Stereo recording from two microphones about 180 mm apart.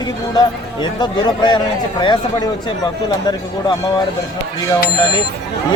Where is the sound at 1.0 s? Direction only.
25° left (ahead or behind).